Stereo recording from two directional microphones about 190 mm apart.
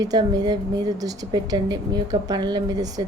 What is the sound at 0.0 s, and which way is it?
A woman's voice, 20° right (ahead or behind).